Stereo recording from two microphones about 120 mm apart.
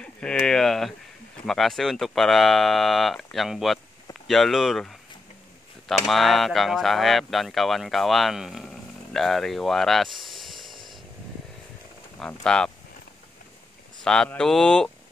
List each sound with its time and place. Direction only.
0.0 s a sound: 5° left (ahead or behind)
1.4 s speech: 5° left (ahead or behind)
10.6 s chainsaw: 40° right (ahead or behind)
12.2 s speech: 5° left (ahead or behind)
14.0 s speech: 5° left (ahead or behind)